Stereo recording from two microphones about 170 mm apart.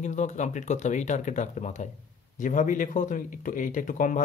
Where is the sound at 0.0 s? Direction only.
45° left (ahead or behind).